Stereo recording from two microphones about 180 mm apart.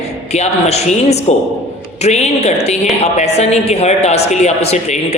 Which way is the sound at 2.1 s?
35° left (ahead or behind).